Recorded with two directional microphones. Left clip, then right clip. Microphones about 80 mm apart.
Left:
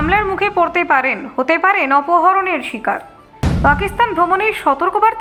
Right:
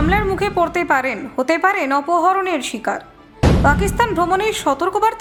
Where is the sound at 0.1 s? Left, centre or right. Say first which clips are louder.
Left 5 dB; centre.